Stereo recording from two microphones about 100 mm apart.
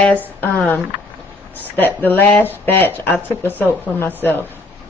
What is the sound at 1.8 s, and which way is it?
Speech, 20° left (ahead or behind).